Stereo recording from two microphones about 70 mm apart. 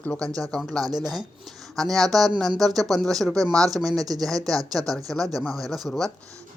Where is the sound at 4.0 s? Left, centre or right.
Right.